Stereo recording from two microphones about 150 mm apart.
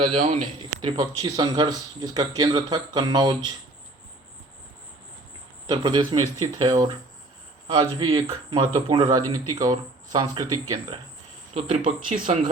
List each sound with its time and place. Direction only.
0.1 s a man's voice: 50° right (ahead or behind)
0.9 s a man's voice: 30° right (ahead or behind)
5.6 s a man's voice: 25° right (ahead or behind)
12.1 s speech: 55° right (ahead or behind)